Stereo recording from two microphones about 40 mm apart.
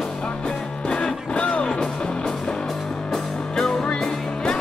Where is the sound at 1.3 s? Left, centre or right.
Left.